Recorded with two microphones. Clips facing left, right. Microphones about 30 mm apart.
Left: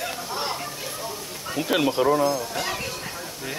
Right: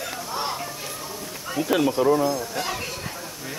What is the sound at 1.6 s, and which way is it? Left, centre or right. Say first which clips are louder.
Speech: right 1 dB; left.